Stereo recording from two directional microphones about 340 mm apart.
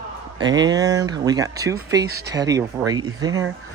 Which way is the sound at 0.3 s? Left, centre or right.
Centre.